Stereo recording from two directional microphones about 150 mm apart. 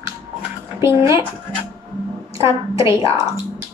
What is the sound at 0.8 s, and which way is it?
Speech, 20° right (ahead or behind).